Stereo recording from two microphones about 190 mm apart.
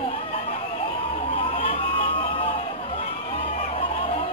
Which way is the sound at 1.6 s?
30° left (ahead or behind).